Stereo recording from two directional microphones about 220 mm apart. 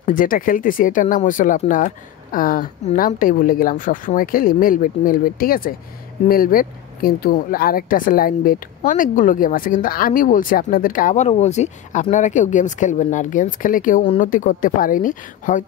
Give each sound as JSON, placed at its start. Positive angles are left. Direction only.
{"t": 0.0, "sound": "speech", "side_deg": 40}